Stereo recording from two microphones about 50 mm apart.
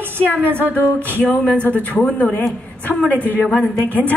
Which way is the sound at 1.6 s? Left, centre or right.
Left.